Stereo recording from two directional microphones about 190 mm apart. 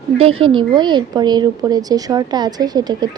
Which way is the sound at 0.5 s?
25° right (ahead or behind).